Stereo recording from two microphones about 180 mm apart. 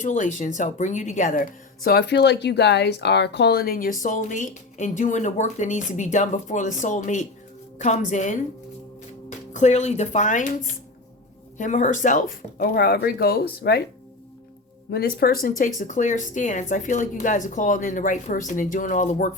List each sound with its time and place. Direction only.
0.0 s speech: 45° left (ahead or behind)
9.5 s speech: 40° left (ahead or behind)
11.5 s speech: 45° left (ahead or behind); by 13.8 s 60° left (ahead or behind)
14.8 s speech: 60° left (ahead or behind)